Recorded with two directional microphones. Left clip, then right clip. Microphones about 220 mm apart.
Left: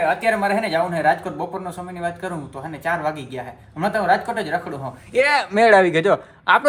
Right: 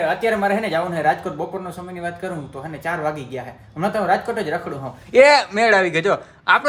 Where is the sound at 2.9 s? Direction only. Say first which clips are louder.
Left 1 dB; 10° right (ahead or behind).